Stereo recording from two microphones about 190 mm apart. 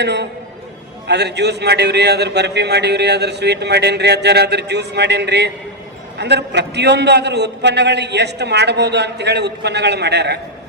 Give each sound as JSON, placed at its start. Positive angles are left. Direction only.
{"t": 0.0, "sound": "a man's voice", "side_deg": -65}